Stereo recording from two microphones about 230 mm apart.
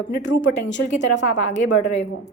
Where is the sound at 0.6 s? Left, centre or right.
Left.